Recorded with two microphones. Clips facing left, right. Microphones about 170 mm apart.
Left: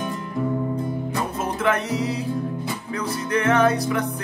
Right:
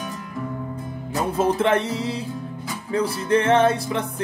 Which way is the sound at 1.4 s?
30° right (ahead or behind).